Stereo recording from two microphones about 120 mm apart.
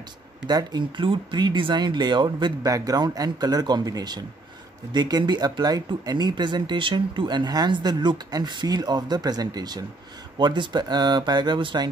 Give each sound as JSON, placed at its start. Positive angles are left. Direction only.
{"t": 0.5, "sound": "speech", "side_deg": -35}